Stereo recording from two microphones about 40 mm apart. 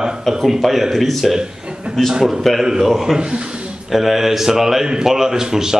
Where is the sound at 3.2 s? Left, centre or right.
Right.